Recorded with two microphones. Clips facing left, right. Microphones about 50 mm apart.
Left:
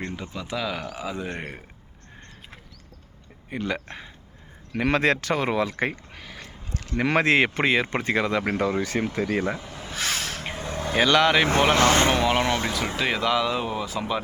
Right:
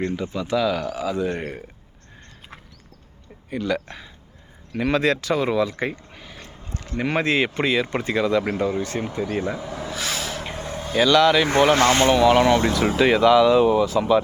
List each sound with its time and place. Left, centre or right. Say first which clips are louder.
0.2 s speech: right 8 dB; centre
3.6 s speech: right 4 dB; left
4.7 s speech: right 1 dB; left
6.7 s speech: left 1 dB; left
7.3 s speech: left 1 dB; left
7.6 s speech: right 1 dB; left
8.5 s speech: right 1 dB; left
9.5 s a sound: right 3 dB; left
10.9 s speech: right 3 dB; left
11.6 s speech: right 4 dB; centre
12.8 s speech: right 8 dB; centre